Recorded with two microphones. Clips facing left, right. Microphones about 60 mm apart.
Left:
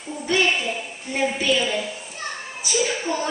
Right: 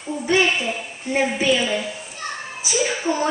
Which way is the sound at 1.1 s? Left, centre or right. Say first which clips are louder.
Right 2 dB; centre.